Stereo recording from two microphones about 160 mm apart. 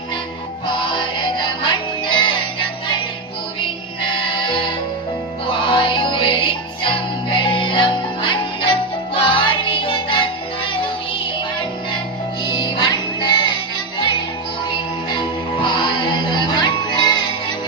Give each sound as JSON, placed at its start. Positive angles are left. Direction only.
{"t": 0.7, "sound": "music", "side_deg": 30}
{"t": 4.1, "sound": "music", "side_deg": 30}
{"t": 12.5, "sound": "music", "side_deg": 30}
{"t": 14.7, "sound": "music", "side_deg": 30}